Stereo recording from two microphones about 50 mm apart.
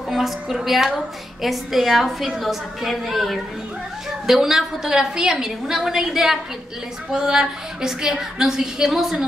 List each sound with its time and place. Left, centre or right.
0.1 s a woman's voice: centre